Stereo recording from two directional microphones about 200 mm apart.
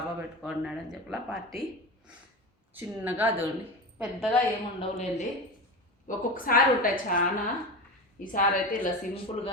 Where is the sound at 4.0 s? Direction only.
5° left (ahead or behind).